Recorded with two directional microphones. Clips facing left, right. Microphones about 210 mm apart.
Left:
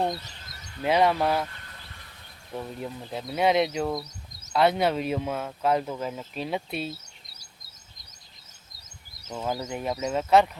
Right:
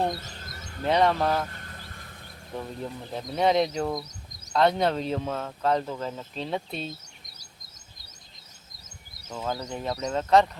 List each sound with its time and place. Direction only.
0.2 s a sound: 50° right (ahead or behind)
0.8 s speech: 5° left (ahead or behind)
1.5 s vehicle: 45° right (ahead or behind)
2.8 s speech: 10° left (ahead or behind)
9.3 s speech: 10° left (ahead or behind)